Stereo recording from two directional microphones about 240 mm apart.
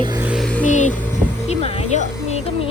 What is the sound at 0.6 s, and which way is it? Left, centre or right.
Music, left.